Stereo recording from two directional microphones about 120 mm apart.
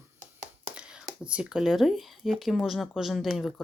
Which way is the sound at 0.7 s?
10° right (ahead or behind).